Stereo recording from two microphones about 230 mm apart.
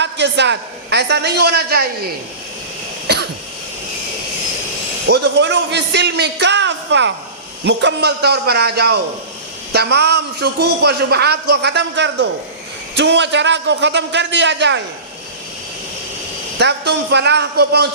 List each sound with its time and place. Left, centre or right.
0.0 s speech: right
3.1 s cough: right
5.0 s speech: right
16.6 s speech: right